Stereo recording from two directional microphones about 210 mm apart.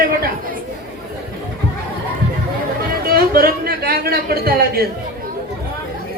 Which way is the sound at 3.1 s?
45° right (ahead or behind).